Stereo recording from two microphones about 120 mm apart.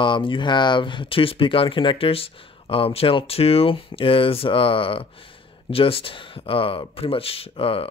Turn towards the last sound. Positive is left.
turn(degrees=50)  # may be behind; listen again after turning